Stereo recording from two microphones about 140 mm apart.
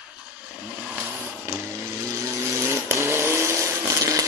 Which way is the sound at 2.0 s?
25° right (ahead or behind).